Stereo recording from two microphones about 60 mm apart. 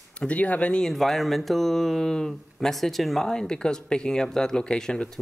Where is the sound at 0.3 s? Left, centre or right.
Left.